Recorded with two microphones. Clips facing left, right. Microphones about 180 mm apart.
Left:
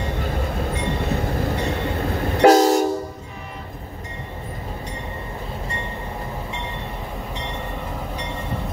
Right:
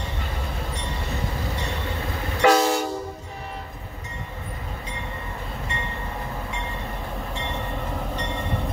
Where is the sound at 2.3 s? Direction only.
45° left (ahead or behind).